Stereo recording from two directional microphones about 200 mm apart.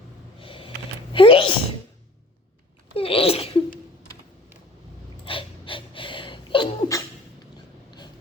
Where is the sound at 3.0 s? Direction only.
30° left (ahead or behind).